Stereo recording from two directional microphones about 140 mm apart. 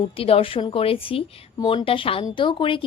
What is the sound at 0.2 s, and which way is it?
Speech, 40° left (ahead or behind).